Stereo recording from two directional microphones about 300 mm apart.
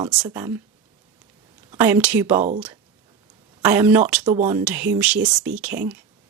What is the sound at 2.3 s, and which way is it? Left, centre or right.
Speech, right.